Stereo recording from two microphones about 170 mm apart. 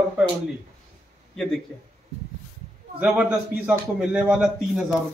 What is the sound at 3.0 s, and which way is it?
A man's voice, 5° right (ahead or behind).